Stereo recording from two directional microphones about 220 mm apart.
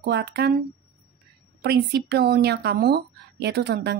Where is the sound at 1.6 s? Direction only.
50° right (ahead or behind).